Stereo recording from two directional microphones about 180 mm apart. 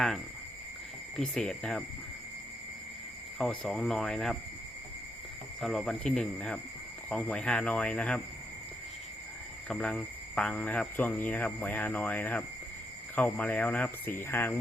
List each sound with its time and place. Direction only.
1.1 s speech: 5° left (ahead or behind)
3.3 s speech: centre (ahead or behind)
5.5 s speech: centre (ahead or behind)
9.6 s speech: 5° left (ahead or behind)